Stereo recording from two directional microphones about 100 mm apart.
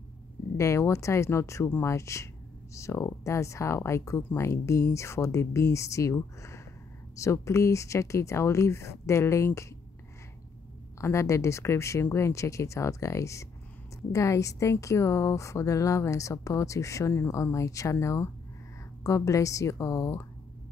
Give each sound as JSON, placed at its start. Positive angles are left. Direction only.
{"t": 0.6, "sound": "speech", "side_deg": 30}
{"t": 11.0, "sound": "a woman's voice", "side_deg": 30}